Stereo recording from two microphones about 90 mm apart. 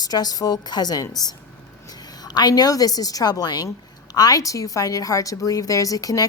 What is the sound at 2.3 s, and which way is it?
A woman's voice, 50° left (ahead or behind).